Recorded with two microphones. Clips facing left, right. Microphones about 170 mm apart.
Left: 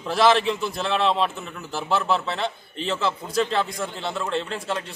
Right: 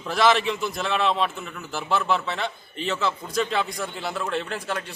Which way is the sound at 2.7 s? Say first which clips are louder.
Even; 30° left (ahead or behind).